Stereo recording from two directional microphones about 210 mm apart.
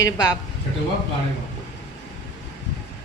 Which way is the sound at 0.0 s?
15° left (ahead or behind).